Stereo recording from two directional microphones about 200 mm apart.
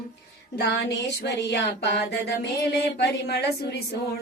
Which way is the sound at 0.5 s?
55° left (ahead or behind).